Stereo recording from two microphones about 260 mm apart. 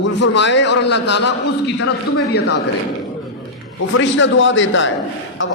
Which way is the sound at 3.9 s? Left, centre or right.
Left.